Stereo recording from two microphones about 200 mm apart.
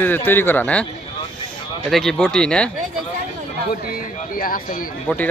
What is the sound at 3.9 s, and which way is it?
Speech, 45° left (ahead or behind).